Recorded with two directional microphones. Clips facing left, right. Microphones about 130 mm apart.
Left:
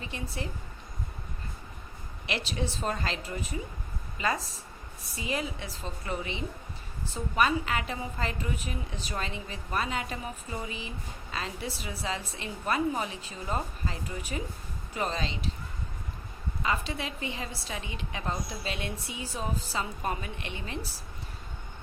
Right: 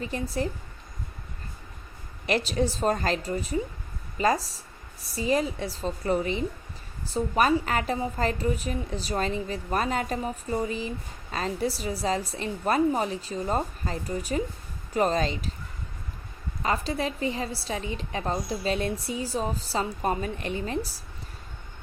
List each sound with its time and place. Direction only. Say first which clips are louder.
0.0 s a woman's voice: right 8 dB; 40° right (ahead or behind)
2.2 s a woman's voice: right 8 dB; 40° right (ahead or behind)
16.6 s a woman's voice: right 5 dB; 35° right (ahead or behind)